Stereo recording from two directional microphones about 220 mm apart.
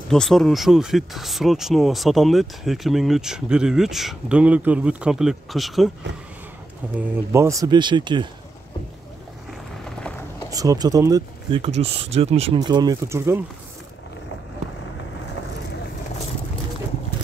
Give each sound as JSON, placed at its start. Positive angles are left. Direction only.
{"t": 0.1, "sound": "speech", "side_deg": 0}
{"t": 7.0, "sound": "speech", "side_deg": -15}
{"t": 10.5, "sound": "speech", "side_deg": -15}